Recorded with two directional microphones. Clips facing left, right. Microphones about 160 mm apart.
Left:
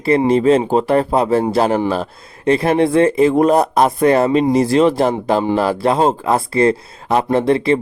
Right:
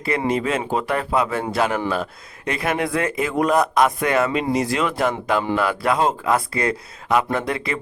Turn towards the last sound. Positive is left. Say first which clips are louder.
# left 10 dB
turn(degrees=30)  # may be behind; listen again after turning